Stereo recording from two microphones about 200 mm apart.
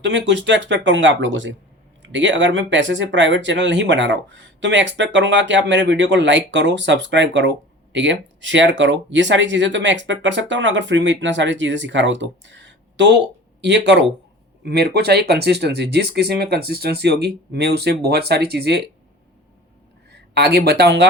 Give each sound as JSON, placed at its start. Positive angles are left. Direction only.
{"t": 0.0, "sound": "speech", "side_deg": -65}
{"t": 20.1, "sound": "speech", "side_deg": -55}